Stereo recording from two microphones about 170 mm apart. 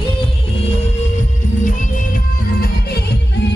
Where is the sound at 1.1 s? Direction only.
50° left (ahead or behind).